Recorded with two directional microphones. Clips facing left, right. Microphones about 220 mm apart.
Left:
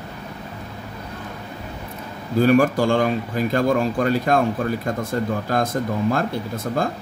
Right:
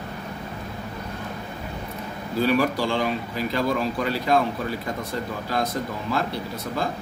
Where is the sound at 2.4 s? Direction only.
50° left (ahead or behind).